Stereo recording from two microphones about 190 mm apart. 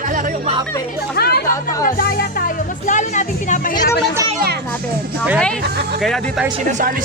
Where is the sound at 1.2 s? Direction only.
55° left (ahead or behind); by 3.7 s 40° left (ahead or behind).